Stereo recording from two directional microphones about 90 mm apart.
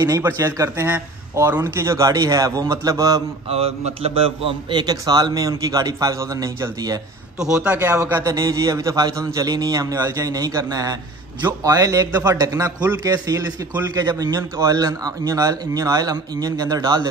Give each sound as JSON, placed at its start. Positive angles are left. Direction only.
{"t": 0.2, "sound": "a man's voice", "side_deg": -30}
{"t": 3.4, "sound": "a man's voice", "side_deg": -90}
{"t": 4.7, "sound": "speech", "side_deg": -45}
{"t": 7.3, "sound": "a man's voice", "side_deg": -10}
{"t": 7.9, "sound": "a man's voice", "side_deg": -35}